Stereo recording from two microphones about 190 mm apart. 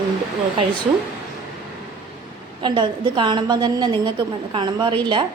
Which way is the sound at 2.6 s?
25° right (ahead or behind).